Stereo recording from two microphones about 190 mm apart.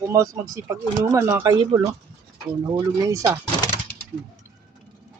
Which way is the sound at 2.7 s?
20° right (ahead or behind).